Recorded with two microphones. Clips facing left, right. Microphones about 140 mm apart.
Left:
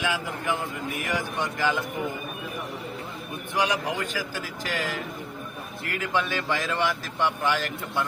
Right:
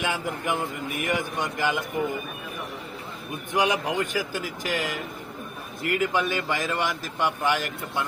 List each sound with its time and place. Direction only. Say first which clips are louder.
0.0 s speech: right 1 dB; 20° right (ahead or behind)
3.5 s speech: right 2 dB; 20° right (ahead or behind)
6.0 s speech: even; 15° right (ahead or behind)